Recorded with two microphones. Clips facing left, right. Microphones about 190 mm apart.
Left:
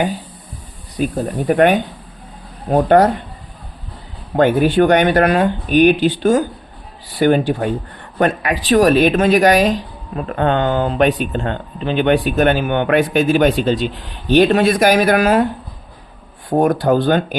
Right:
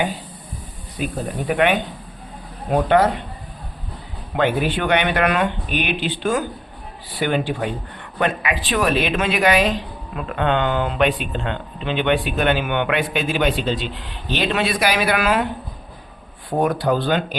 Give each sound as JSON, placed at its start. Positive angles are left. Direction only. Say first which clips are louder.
{"t": 1.0, "sound": "speech", "louder": "left 6 dB", "side_deg": 45}
{"t": 4.4, "sound": "speech", "louder": "left 8 dB", "side_deg": 45}
{"t": 16.5, "sound": "speech", "louder": "left 5 dB", "side_deg": 45}